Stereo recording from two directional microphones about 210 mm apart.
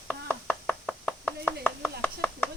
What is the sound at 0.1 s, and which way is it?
Chopping, 5° left (ahead or behind).